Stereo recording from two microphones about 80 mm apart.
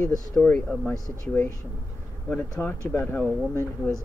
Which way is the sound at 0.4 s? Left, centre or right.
Centre.